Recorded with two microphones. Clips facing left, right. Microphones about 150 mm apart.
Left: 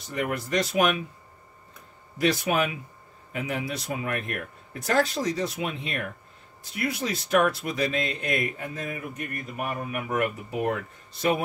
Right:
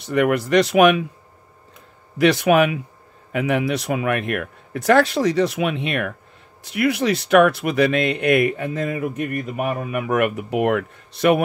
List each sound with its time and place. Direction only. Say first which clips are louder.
0.0 s speech: right 11 dB; 75° right (ahead or behind)
2.1 s speech: right 9 dB; 75° right (ahead or behind)